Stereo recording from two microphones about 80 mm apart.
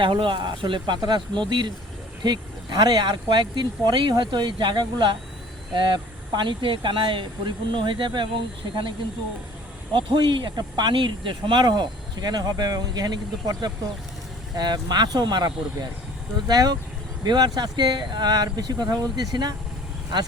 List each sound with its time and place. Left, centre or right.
0.0 s speech: right
2.2 s speech: right
9.9 s speech: right
14.5 s speech: right